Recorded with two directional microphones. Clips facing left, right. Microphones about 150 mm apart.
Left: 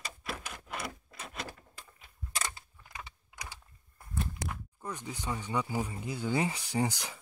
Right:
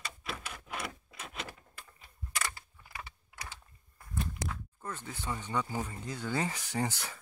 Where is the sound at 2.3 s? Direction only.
20° left (ahead or behind).